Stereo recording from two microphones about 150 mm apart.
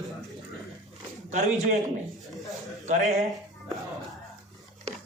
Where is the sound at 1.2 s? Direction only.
50° right (ahead or behind).